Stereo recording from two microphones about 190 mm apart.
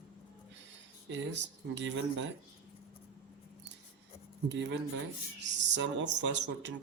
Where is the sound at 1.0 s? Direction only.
70° right (ahead or behind).